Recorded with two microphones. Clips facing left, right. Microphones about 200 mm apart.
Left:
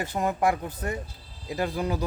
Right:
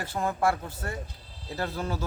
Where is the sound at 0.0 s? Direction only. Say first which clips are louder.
Left 2 dB; 20° left (ahead or behind).